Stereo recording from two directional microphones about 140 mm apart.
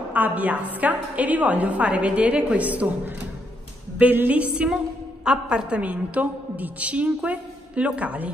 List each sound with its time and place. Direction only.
0.1 s a woman's voice: 10° right (ahead or behind)
4.0 s a woman's voice: 10° right (ahead or behind)